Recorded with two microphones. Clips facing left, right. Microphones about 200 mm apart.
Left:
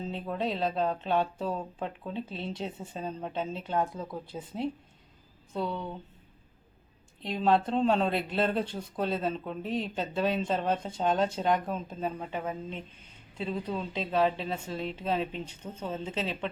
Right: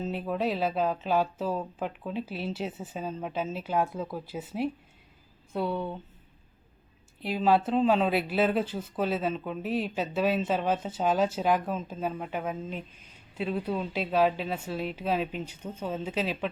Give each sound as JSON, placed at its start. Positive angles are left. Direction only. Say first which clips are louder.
{"t": 0.1, "sound": "speech", "louder": "right 2 dB", "side_deg": -5}
{"t": 7.2, "sound": "speech", "louder": "right 1 dB", "side_deg": -5}
{"t": 15.2, "sound": "speech", "louder": "right 1 dB", "side_deg": 30}
{"t": 15.7, "sound": "speech", "louder": "right 3 dB", "side_deg": -10}